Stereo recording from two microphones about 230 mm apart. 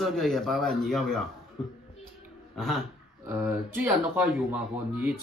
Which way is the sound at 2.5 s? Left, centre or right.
Centre.